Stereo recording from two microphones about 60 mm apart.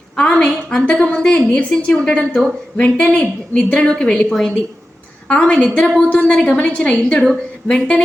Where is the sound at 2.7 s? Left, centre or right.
Left.